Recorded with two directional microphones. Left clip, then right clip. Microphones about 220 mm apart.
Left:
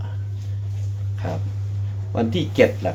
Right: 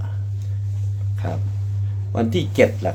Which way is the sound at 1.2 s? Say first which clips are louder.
Left 1 dB; 25° right (ahead or behind).